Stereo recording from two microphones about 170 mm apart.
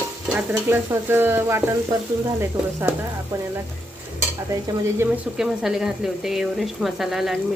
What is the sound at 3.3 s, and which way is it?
Stir, 15° right (ahead or behind).